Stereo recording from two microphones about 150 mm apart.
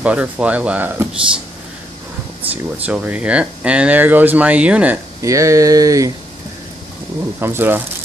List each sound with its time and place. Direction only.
0.0 s speech: 10° right (ahead or behind)
2.5 s speech: 10° right (ahead or behind)
5.2 s speech: 20° right (ahead or behind)
7.3 s speech: 15° right (ahead or behind)